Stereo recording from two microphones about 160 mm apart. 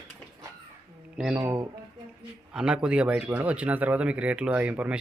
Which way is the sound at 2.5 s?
5° right (ahead or behind).